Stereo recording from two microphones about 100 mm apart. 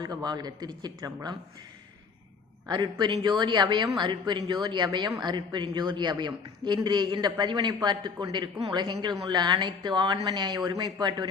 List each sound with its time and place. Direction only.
0.0 s a man's voice: 45° right (ahead or behind)
2.6 s a man's voice: 50° right (ahead or behind)